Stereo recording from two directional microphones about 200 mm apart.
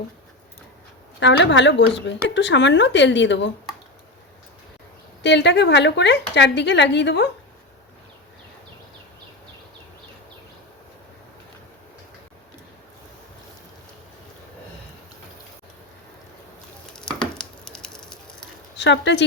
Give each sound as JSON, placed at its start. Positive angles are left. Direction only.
{"t": 1.2, "sound": "speech", "side_deg": 65}
{"t": 5.2, "sound": "speech", "side_deg": 60}
{"t": 16.9, "sound": "a sound", "side_deg": 5}
{"t": 18.8, "sound": "speech", "side_deg": 60}